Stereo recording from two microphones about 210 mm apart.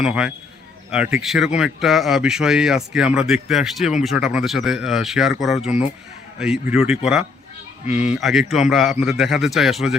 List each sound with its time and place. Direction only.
0.0 s speech: 5° right (ahead or behind)
7.9 s speech: 35° left (ahead or behind)
8.1 s speech: centre (ahead or behind)